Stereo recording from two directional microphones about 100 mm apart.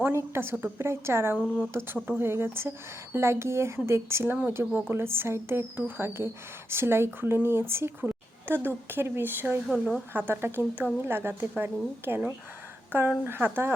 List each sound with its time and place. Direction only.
0.0 s speech: 25° right (ahead or behind)
9.6 s a woman's voice: centre (ahead or behind)
10.1 s speech: 20° right (ahead or behind)